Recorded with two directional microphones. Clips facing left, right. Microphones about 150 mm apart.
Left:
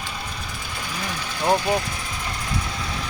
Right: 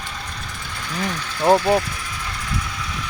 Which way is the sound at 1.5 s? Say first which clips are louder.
Right 5 dB; 30° right (ahead or behind).